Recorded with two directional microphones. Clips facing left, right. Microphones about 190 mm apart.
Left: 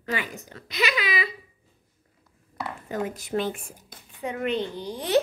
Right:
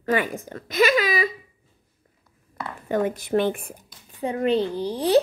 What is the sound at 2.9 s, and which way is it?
Speech, 60° right (ahead or behind).